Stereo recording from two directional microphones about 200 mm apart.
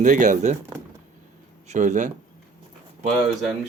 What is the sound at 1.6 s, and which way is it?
Speech, 35° right (ahead or behind).